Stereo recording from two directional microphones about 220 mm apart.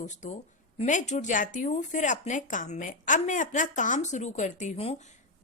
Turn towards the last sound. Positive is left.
turn(degrees=30)  # may be behind; listen again after turning